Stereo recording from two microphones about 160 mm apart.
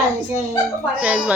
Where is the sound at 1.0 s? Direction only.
5° right (ahead or behind).